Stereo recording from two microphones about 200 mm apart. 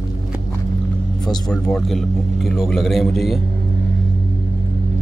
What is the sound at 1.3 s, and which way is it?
Speech, 5° left (ahead or behind).